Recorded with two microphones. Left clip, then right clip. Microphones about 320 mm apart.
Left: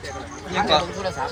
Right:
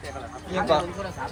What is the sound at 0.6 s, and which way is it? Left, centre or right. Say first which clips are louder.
Speech: left 3 dB; centre.